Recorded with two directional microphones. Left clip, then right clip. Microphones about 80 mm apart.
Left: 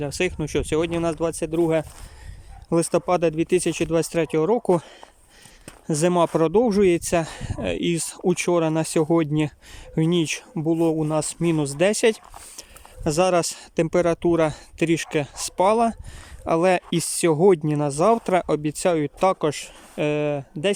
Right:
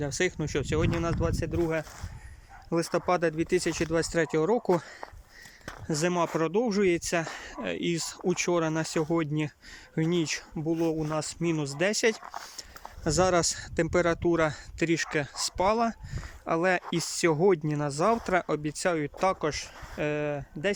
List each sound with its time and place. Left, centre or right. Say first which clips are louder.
0.0 s speech: left 4 dB; left
1.5 s speech: left 11 dB; left
5.9 s speech: left 7 dB; left
6.2 s speech: left 8 dB; left
10.6 s speech: left 8 dB; left
13.1 s speech: left 5 dB; left